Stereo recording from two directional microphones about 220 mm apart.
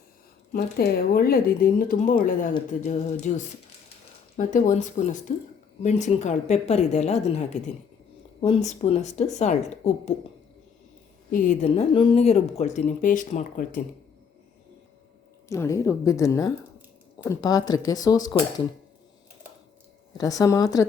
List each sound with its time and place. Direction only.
0.5 s speech: 45° left (ahead or behind)
11.3 s speech: 35° left (ahead or behind)
15.4 s speech: 15° left (ahead or behind)
20.1 s speech: 15° left (ahead or behind)